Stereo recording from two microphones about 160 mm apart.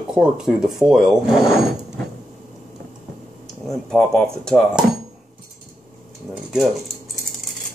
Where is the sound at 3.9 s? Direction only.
5° left (ahead or behind).